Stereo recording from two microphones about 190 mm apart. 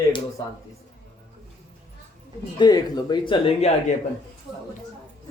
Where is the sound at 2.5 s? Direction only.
20° left (ahead or behind).